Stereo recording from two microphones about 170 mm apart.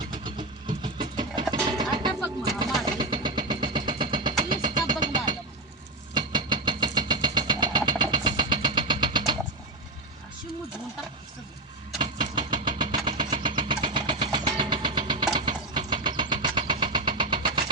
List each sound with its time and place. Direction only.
0.0 s a sound: 25° right (ahead or behind)
2.4 s vehicle: 25° right (ahead or behind)
11.9 s vehicle: 25° right (ahead or behind)